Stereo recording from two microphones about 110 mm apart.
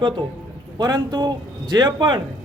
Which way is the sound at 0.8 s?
40° right (ahead or behind).